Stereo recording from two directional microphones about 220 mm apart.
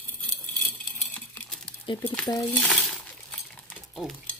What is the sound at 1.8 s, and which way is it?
Speech, 15° left (ahead or behind).